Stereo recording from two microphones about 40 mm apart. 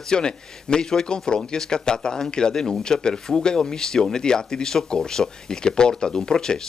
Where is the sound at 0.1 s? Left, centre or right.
Centre.